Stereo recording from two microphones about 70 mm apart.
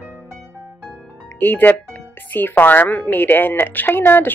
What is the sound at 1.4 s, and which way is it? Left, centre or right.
A woman's voice, left.